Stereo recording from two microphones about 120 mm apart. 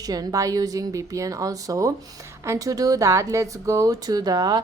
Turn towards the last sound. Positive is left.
turn(degrees=-35)  # may be behind; listen again after turning